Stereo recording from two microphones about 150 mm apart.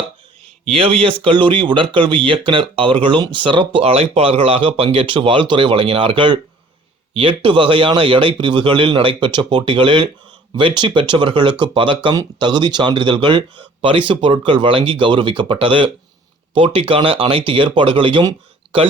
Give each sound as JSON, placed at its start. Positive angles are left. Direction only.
{"t": 0.7, "sound": "speech", "side_deg": -40}